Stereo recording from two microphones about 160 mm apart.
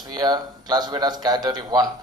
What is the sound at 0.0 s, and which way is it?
A man's voice, 25° right (ahead or behind).